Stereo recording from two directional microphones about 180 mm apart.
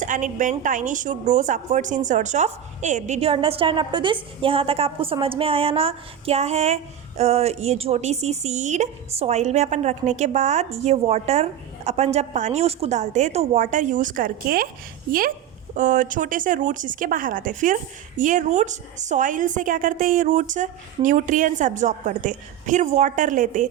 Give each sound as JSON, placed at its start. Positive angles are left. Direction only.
{"t": 0.0, "sound": "a woman's voice", "side_deg": -45}
{"t": 15.7, "sound": "a woman's voice", "side_deg": -45}